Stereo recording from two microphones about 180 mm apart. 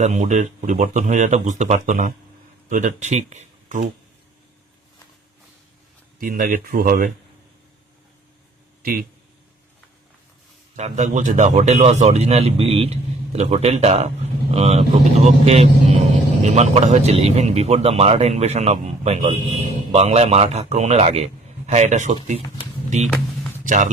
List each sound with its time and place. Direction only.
0.0 s speech: 40° right (ahead or behind)
6.1 s speech: 50° right (ahead or behind)
10.8 s speech: 40° right (ahead or behind)